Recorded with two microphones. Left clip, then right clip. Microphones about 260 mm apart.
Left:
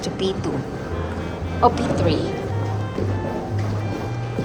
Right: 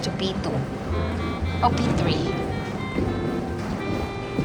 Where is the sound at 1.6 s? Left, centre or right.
Centre.